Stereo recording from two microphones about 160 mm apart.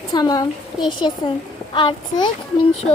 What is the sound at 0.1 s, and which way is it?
A woman's voice, 25° left (ahead or behind).